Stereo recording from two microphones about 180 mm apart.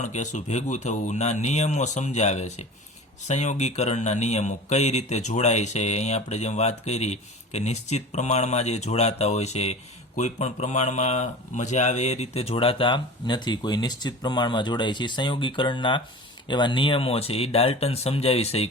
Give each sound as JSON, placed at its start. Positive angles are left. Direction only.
{"t": 0.0, "sound": "a man's voice", "side_deg": 40}